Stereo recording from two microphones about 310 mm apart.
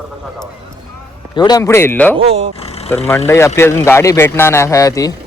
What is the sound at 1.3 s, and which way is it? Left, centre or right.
Speech, centre.